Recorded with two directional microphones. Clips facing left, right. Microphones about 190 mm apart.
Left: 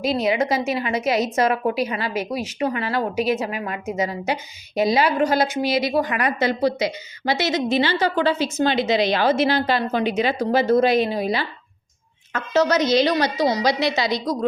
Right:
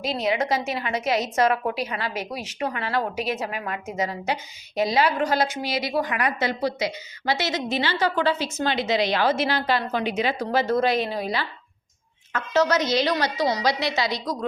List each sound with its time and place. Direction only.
0.0 s a woman's voice: 5° left (ahead or behind); by 10.4 s 35° left (ahead or behind)
10.5 s a woman's voice: 15° left (ahead or behind)